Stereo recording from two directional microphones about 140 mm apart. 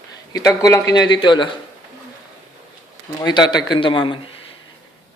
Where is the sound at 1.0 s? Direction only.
35° left (ahead or behind).